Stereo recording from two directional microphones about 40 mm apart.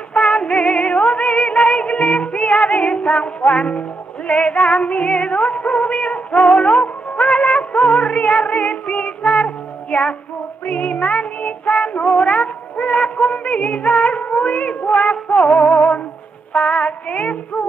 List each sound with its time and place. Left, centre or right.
0.1 s female singing: left
0.7 s music: left
8.9 s music: centre
10.7 s child singing: left
11.9 s a sound: left
12.7 s music: left
16.5 s female singing: left